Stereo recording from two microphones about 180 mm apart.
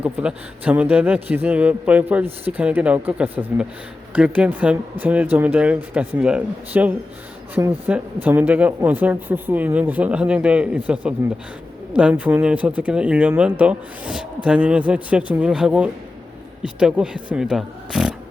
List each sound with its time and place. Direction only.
0.0 s speech: 5° right (ahead or behind)